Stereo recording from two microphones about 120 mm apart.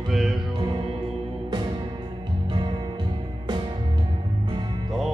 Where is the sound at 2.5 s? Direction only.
40° right (ahead or behind).